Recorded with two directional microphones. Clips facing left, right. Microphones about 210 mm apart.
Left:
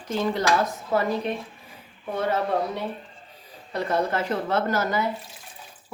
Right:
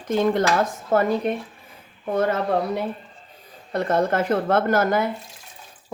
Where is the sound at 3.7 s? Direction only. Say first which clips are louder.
Right 4 dB; 50° right (ahead or behind).